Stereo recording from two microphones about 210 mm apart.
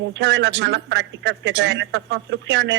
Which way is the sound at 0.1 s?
55° right (ahead or behind).